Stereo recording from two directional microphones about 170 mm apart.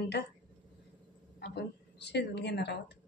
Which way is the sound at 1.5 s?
80° left.